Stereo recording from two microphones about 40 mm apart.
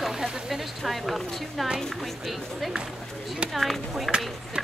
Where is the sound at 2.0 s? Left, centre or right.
Centre.